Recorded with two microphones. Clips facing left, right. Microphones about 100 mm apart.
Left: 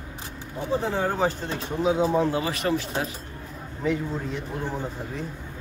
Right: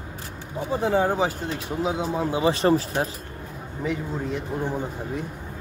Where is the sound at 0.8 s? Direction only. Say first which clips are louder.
Right 5 dB; 10° right (ahead or behind).